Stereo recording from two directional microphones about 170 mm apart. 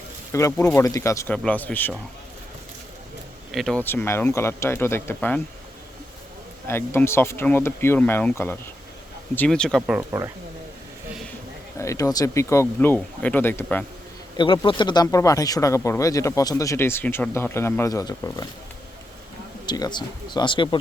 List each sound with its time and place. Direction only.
0.3 s speech: 15° left (ahead or behind)
3.5 s speech: centre (ahead or behind)
6.7 s speech: 15° left (ahead or behind)
11.8 s speech: 20° left (ahead or behind)
14.3 s speech: 25° left (ahead or behind)
19.6 s speech: 25° left (ahead or behind)